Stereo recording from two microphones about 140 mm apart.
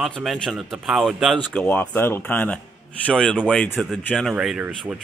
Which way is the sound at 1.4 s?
10° left (ahead or behind).